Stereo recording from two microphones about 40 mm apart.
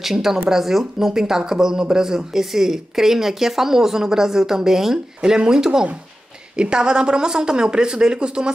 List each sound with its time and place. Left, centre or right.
0.0 s speech: centre